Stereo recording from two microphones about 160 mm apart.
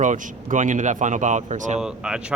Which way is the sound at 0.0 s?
55° right (ahead or behind).